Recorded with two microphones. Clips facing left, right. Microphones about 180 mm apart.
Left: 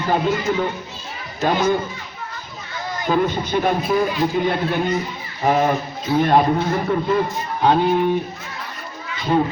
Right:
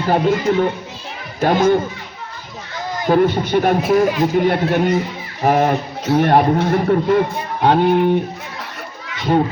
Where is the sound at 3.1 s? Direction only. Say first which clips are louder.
Right 5 dB; 65° right (ahead or behind).